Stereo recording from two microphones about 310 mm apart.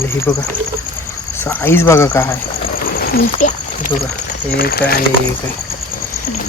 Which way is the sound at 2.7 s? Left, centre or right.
Left.